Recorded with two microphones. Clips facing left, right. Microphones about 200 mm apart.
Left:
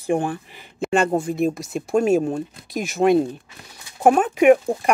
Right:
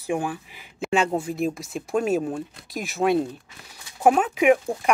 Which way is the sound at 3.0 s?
15° left (ahead or behind).